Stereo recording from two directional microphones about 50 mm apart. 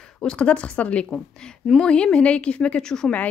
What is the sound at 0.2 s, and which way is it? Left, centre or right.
Speech, centre.